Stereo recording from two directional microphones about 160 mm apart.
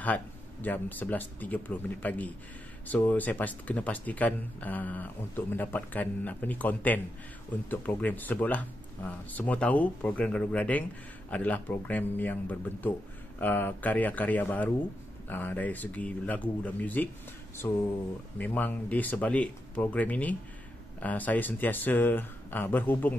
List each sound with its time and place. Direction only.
0.0 s speech: 10° left (ahead or behind)